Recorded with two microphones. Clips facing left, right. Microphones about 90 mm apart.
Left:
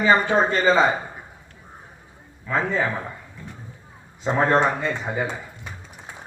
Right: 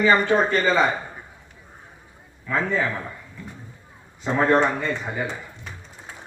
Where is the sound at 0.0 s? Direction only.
20° left (ahead or behind).